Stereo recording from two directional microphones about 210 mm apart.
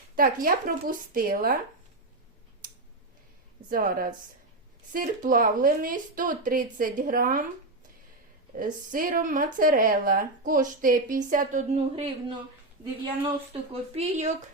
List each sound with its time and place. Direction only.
0.2 s speech: 40° right (ahead or behind)
3.7 s a woman's voice: 45° right (ahead or behind)
8.5 s a woman's voice: 40° right (ahead or behind)
13.5 s a woman's voice: 30° right (ahead or behind)